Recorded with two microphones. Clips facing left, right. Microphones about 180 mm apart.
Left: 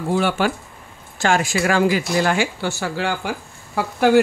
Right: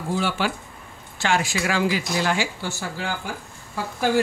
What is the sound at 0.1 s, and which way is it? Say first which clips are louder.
A woman's voice: left 5 dB; 55° left (ahead or behind).